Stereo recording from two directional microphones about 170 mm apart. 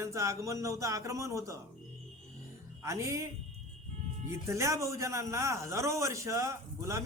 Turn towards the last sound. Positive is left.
turn(degrees=-15)  # may be behind; listen again after turning